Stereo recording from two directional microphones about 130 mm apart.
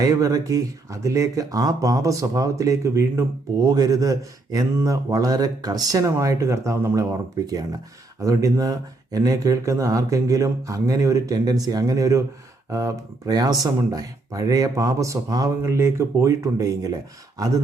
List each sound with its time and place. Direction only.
0.0 s speech: 30° right (ahead or behind)